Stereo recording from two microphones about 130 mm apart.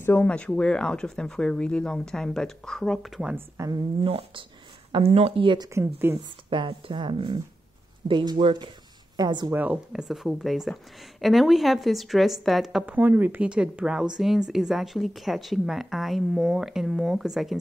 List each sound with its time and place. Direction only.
0.0 s speech: 15° left (ahead or behind); by 3.3 s 5° right (ahead or behind)
3.3 s speech: 25° right (ahead or behind)
4.0 s speech: 45° right (ahead or behind)
6.1 s speech: 15° right (ahead or behind)
6.5 s a woman's voice: 40° right (ahead or behind)
9.5 s speech: 15° right (ahead or behind)
12.9 s speech: 15° right (ahead or behind)